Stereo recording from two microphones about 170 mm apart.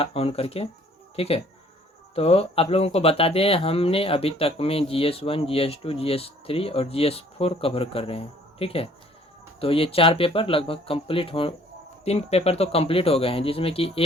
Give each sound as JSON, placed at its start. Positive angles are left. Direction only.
{"t": 0.0, "sound": "speech", "side_deg": 35}